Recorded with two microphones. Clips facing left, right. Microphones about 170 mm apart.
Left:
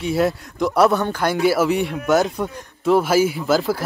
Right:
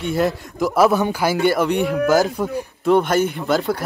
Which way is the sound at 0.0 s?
Centre (ahead or behind).